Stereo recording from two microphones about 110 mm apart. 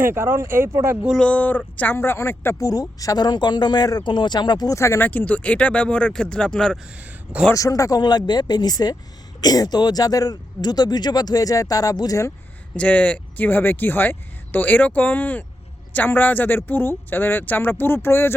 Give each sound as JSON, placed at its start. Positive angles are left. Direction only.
{"t": 0.0, "sound": "speech", "side_deg": -20}
{"t": 1.2, "sound": "speech", "side_deg": 15}
{"t": 4.8, "sound": "speech", "side_deg": 20}
{"t": 7.5, "sound": "speech", "side_deg": 30}
{"t": 12.7, "sound": "speech", "side_deg": 10}